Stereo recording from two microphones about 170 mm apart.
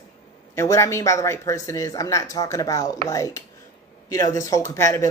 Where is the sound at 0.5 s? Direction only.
15° left (ahead or behind).